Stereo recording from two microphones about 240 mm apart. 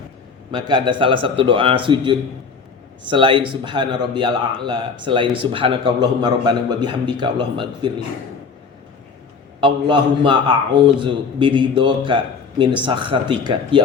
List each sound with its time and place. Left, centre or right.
0.5 s a man's voice: centre
9.6 s a man's voice: centre